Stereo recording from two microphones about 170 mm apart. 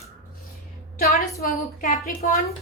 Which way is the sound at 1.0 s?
60° left (ahead or behind).